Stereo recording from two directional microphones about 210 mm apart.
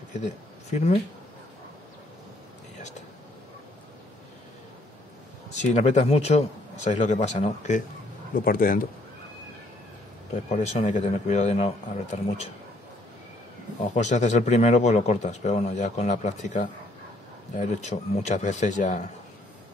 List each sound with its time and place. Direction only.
0.2 s speech: 35° left (ahead or behind)
5.5 s a man's voice: 35° left (ahead or behind)
10.5 s a man's voice: 30° left (ahead or behind)
13.9 s a man's voice: 35° left (ahead or behind)